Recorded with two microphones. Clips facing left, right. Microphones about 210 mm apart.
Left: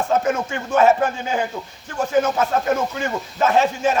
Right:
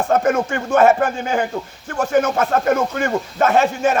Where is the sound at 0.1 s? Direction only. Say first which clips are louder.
Right 5 dB; 55° right (ahead or behind).